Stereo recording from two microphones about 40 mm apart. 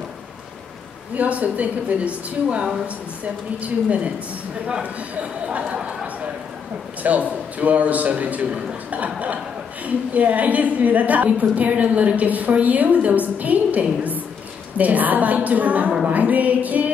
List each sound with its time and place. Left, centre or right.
1.1 s a woman's voice: right
5.5 s a woman's voice: right
5.8 s a sound: right
7.0 s a woman's voice: right